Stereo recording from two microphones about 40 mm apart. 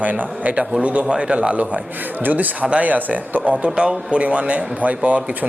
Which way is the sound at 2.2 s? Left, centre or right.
Right.